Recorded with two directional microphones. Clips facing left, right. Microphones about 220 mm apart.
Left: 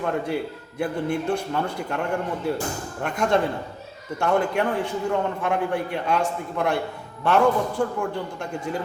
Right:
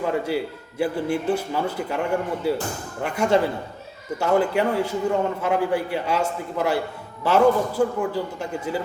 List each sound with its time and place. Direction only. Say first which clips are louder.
0.0 s a man's voice: right 2 dB; 5° right (ahead or behind)